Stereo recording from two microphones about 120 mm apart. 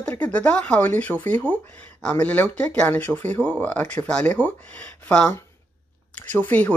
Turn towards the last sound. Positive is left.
turn(degrees=15)  # may be behind; listen again after turning